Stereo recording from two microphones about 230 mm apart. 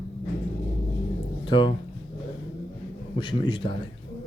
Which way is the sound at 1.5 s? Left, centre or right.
Left.